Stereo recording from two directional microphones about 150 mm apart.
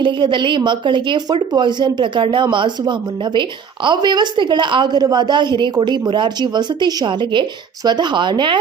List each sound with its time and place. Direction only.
0.0 s a woman's voice: 35° right (ahead or behind)